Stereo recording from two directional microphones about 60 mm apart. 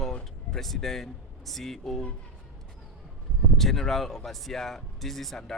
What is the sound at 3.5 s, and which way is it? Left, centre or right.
A man's voice, centre.